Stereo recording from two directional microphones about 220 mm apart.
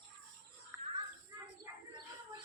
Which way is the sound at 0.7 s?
10° right (ahead or behind).